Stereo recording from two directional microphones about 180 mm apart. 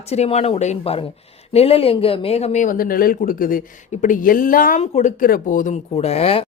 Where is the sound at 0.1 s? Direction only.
35° left (ahead or behind).